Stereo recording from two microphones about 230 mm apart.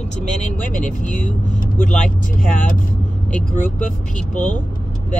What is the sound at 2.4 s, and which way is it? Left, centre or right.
Speech, left.